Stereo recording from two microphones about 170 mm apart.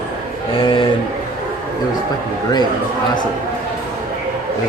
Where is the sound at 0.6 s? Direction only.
30° left (ahead or behind).